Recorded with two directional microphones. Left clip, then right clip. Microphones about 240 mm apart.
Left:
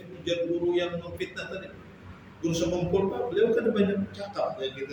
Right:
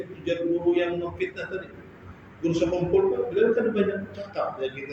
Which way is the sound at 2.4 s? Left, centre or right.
Left.